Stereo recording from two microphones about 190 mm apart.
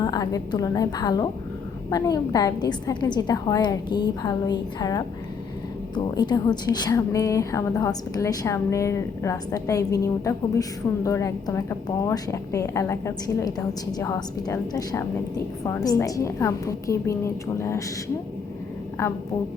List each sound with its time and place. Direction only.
0.0 s a woman's voice: 20° left (ahead or behind)